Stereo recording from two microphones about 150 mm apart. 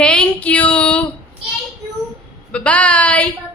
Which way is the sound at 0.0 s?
5° left (ahead or behind).